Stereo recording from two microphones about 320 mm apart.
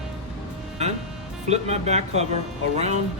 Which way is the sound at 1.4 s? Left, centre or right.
Right.